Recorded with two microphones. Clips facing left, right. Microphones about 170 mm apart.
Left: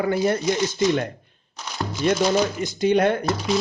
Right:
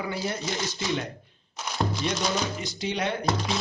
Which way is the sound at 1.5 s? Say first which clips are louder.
Right 1 dB; centre (ahead or behind).